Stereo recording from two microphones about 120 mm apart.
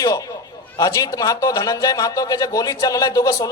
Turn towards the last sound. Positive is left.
turn(degrees=30)  # may be behind; listen again after turning